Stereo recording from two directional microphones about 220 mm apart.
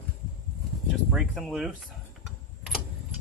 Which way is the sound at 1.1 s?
Centre (ahead or behind).